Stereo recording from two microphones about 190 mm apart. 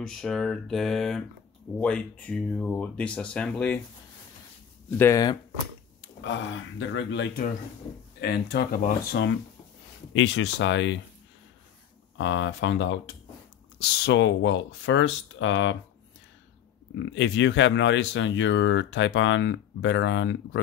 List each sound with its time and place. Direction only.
0.0 s speech: centre (ahead or behind)
4.9 s speech: 15° left (ahead or behind)
5.9 s speech: 75° left (ahead or behind)
8.2 s speech: 60° left (ahead or behind)
10.1 s speech: 75° left (ahead or behind)
12.2 s speech: 80° left
13.7 s speech: 60° left (ahead or behind)
17.0 s speech: 70° left (ahead or behind)